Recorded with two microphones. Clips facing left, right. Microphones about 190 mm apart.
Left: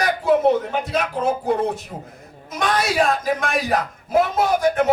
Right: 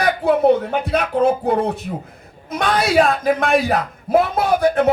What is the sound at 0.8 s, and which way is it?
Speech, 60° right (ahead or behind).